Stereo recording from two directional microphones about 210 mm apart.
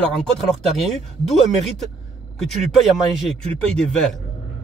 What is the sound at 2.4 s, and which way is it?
Speech, centre (ahead or behind).